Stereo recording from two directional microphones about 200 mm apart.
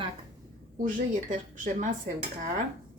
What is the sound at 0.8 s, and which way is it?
Speech, 40° right (ahead or behind).